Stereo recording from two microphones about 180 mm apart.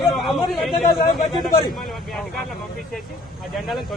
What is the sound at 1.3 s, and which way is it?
Speech, 25° left (ahead or behind).